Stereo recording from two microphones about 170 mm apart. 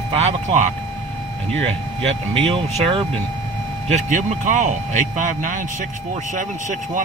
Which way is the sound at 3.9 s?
50° right (ahead or behind).